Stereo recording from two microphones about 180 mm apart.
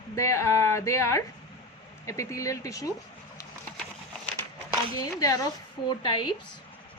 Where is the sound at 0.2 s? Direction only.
15° left (ahead or behind).